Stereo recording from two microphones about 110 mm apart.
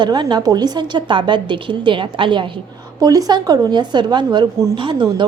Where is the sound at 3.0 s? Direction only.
35° right (ahead or behind).